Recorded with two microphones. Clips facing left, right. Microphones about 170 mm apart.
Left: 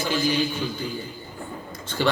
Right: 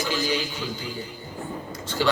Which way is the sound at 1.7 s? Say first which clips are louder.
Even; 55° left (ahead or behind).